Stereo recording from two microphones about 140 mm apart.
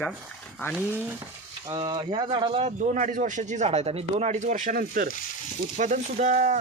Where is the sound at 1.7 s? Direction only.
30° right (ahead or behind).